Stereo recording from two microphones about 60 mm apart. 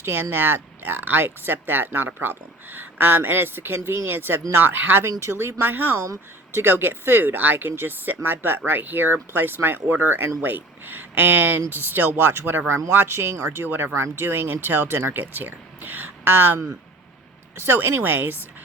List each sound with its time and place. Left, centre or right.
0.0 s speech: right
13.7 s speech: right
13.9 s speech: right
17.6 s speech: right